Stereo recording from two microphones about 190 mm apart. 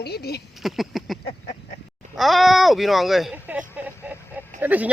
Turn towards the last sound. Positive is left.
turn(degrees=-10)  # may be behind; listen again after turning